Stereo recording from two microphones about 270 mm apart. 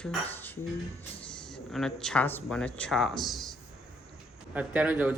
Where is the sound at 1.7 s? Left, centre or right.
Centre.